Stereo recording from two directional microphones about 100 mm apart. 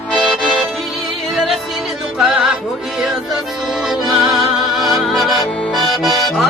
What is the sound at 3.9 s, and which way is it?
Music, centre (ahead or behind).